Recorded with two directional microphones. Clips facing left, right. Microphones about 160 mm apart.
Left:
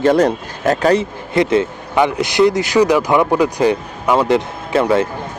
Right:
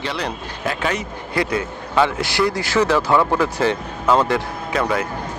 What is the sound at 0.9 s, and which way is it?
Speech, 25° left (ahead or behind).